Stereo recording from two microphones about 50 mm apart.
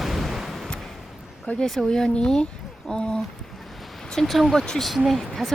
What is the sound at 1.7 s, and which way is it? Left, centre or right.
Speech, centre.